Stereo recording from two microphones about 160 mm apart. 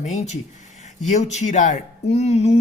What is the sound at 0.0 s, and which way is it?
Speech, 50° left (ahead or behind).